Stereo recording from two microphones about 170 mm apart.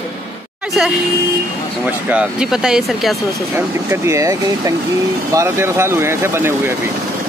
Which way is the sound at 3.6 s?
15° right (ahead or behind).